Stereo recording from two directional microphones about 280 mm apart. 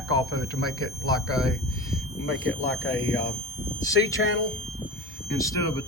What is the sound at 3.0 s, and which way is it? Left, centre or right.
Speech, centre.